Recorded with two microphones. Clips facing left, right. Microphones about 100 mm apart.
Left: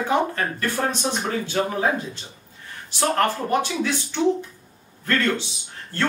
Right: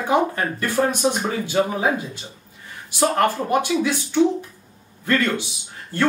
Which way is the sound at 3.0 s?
15° right (ahead or behind).